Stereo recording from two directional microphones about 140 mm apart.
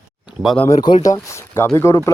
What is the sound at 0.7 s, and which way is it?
Speech, 30° left (ahead or behind).